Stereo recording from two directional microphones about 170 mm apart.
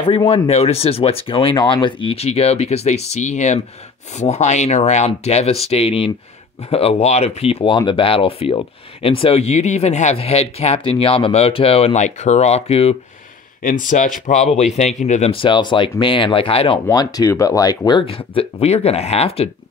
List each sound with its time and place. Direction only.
0.0 s speech: 30° left (ahead or behind)
13.6 s speech: 50° left (ahead or behind); by 16.8 s 30° left (ahead or behind)
16.8 s speech: 20° left (ahead or behind)